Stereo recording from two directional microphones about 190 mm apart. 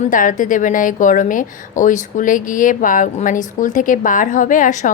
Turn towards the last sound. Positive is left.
turn(degrees=40)  # may be behind; listen again after turning